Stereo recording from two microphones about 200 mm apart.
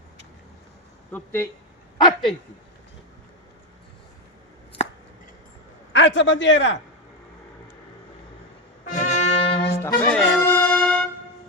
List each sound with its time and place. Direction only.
1.1 s speech: 10° left (ahead or behind)
2.0 s speech: 20° left (ahead or behind)
5.9 s a man's voice: 65° left (ahead or behind)
8.9 s brass instrument: 40° left (ahead or behind)
9.8 s music: 5° left (ahead or behind)